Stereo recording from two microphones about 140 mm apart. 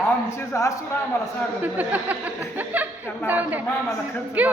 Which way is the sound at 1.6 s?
10° right (ahead or behind).